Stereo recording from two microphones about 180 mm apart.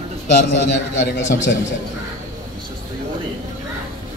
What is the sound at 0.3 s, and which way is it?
A man's voice, 65° left (ahead or behind).